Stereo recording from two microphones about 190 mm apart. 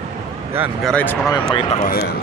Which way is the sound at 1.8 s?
50° left (ahead or behind).